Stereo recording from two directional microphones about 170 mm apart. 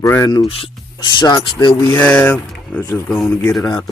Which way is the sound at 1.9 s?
10° left (ahead or behind).